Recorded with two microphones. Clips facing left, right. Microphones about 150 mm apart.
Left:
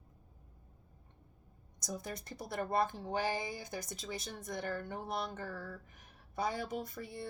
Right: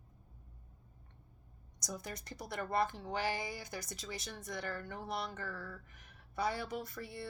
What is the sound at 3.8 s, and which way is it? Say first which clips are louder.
Speech: left 2 dB; 50° left (ahead or behind).